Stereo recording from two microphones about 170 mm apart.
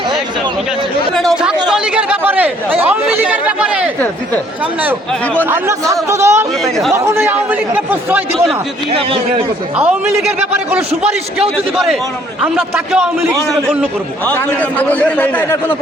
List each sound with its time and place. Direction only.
1.6 s speech: 5° right (ahead or behind)
5.5 s speech: 15° right (ahead or behind)
8.9 s a man's voice: 35° right (ahead or behind)
9.7 s speech: 5° right (ahead or behind)
12.4 s a man's voice: 5° right (ahead or behind)
14.3 s a man's voice: 10° left (ahead or behind)